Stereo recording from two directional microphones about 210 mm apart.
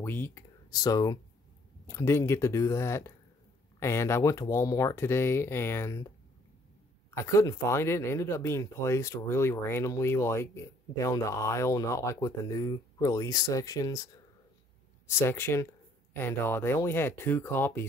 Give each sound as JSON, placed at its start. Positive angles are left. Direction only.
{"t": 0.0, "sound": "speech", "side_deg": 10}